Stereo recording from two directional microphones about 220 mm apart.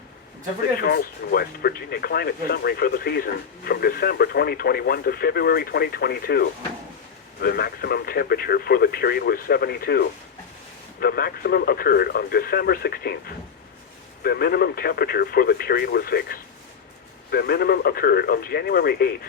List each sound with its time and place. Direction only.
0.8 s speech: 45° left (ahead or behind)